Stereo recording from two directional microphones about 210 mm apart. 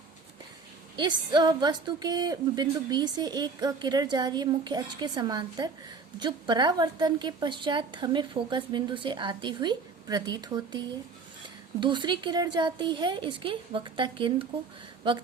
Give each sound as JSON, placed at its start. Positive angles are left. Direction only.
{"t": 0.9, "sound": "a woman's voice", "side_deg": -20}